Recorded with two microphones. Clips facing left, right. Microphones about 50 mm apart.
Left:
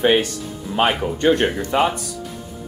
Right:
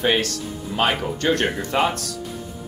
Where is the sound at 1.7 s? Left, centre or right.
Centre.